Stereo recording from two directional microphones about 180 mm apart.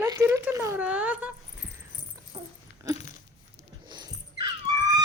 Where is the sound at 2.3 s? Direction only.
25° right (ahead or behind).